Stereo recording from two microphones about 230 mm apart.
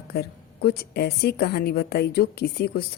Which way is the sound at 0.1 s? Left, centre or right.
Left.